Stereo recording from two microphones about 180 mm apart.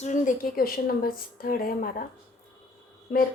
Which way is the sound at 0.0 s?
45° left (ahead or behind).